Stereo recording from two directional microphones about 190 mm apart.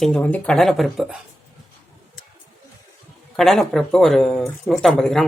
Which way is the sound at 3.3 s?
Centre (ahead or behind).